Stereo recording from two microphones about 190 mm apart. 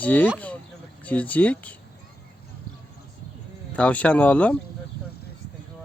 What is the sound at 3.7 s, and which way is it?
Speech, 5° left (ahead or behind).